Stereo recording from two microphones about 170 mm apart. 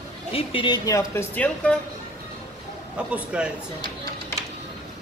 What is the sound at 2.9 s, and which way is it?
Speech, 5° right (ahead or behind).